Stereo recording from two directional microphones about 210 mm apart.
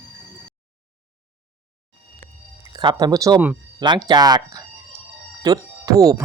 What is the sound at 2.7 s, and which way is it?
Speech, 20° right (ahead or behind).